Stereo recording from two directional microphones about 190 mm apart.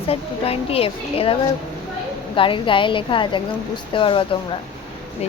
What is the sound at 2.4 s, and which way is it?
A woman's voice, 25° left (ahead or behind).